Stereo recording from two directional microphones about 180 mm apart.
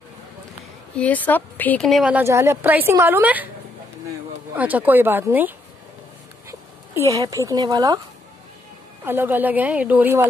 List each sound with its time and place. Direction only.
0.9 s a woman's voice: 10° left (ahead or behind); by 3.4 s 10° right (ahead or behind)
4.6 s a woman's voice: 10° right (ahead or behind)
7.1 s speech: 20° right (ahead or behind)
9.0 s a woman's voice: 10° right (ahead or behind)